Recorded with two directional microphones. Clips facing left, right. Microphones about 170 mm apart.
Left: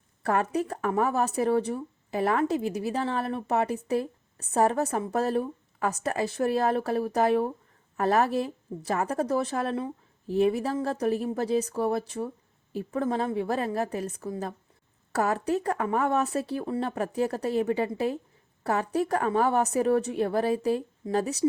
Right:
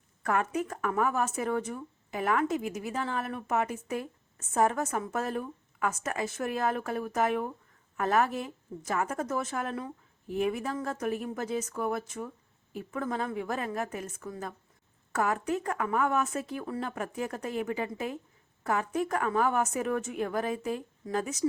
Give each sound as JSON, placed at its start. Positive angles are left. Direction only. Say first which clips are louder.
{"t": 0.2, "sound": "speech", "louder": "left 3 dB", "side_deg": 35}